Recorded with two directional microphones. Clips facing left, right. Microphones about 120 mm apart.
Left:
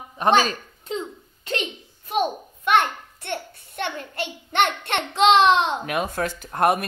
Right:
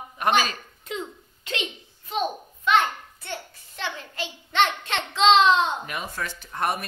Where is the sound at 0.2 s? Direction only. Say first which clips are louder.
Left 4 dB; 30° left (ahead or behind).